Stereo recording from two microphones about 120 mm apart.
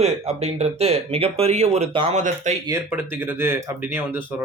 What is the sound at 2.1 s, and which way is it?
Speech, 85° right.